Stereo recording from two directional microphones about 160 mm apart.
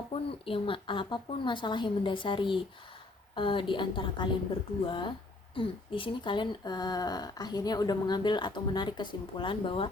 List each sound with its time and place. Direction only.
0.1 s a woman's voice: 35° left (ahead or behind)